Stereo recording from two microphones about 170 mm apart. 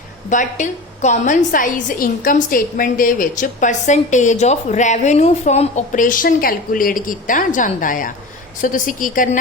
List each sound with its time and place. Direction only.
0.3 s a woman's voice: 45° left (ahead or behind)